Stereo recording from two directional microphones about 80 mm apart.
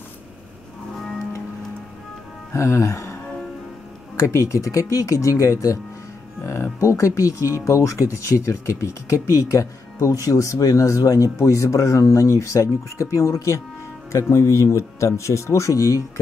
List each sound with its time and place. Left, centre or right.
2.5 s speech: left
4.2 s speech: left